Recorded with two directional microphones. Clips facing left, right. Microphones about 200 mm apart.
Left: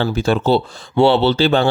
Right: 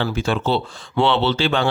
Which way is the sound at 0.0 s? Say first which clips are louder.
Left 4 dB; 40° left (ahead or behind).